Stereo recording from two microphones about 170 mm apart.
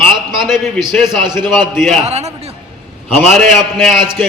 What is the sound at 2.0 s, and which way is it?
Speech, 40° right (ahead or behind).